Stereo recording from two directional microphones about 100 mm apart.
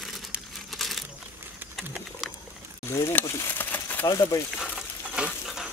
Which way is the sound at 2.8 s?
25° left (ahead or behind).